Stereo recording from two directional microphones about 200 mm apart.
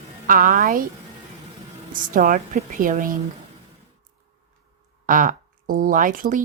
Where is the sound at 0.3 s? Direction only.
45° right (ahead or behind).